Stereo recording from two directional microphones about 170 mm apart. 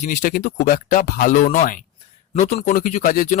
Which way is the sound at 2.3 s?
40° left (ahead or behind).